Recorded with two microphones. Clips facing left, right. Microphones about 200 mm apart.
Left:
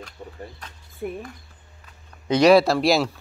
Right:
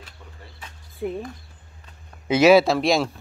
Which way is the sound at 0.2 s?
35° left (ahead or behind).